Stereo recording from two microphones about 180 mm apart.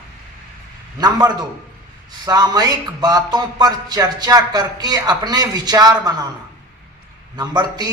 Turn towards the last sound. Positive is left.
turn(degrees=-25)  # may be behind; listen again after turning